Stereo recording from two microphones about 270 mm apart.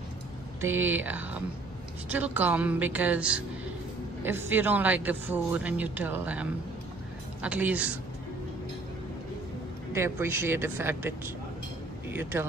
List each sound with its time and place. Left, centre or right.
0.7 s a man's voice: centre
9.9 s a man's voice: centre